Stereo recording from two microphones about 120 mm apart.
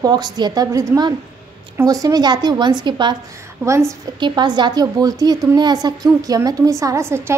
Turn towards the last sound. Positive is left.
turn(degrees=-20)  # may be behind; listen again after turning